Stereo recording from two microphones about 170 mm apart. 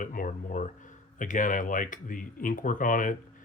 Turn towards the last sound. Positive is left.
turn(degrees=50)  # may be behind; listen again after turning